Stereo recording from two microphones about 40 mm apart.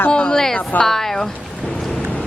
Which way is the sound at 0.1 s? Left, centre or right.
Centre.